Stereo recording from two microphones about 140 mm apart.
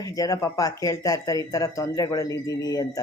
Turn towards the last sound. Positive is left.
turn(degrees=25)  # may be behind; listen again after turning